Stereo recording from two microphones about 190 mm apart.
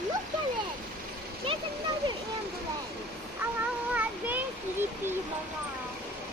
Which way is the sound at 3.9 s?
10° right (ahead or behind).